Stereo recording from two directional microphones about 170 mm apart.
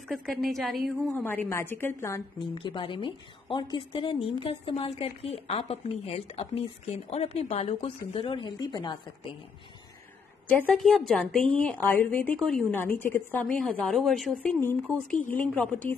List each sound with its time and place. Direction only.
0.1 s a woman's voice: centre (ahead or behind)
1.1 s a woman's voice: 10° left (ahead or behind)
2.4 s a woman's voice: 30° left (ahead or behind)
10.6 s a woman's voice: 5° left (ahead or behind)